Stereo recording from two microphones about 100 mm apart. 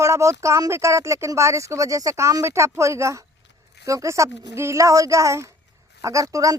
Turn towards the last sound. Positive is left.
turn(degrees=-35)  # may be behind; listen again after turning